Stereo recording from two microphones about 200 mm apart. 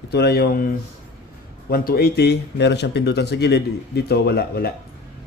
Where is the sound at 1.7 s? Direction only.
50° left (ahead or behind).